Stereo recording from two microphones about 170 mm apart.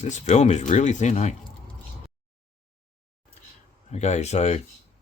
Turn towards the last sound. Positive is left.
turn(degrees=40)  # may be behind; listen again after turning